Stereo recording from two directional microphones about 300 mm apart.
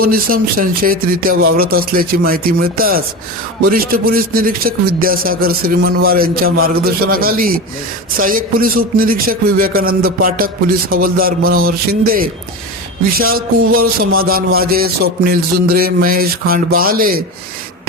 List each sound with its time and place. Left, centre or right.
0.0 s music: right